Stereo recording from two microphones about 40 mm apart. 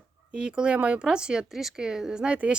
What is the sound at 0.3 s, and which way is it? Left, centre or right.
Speech, right.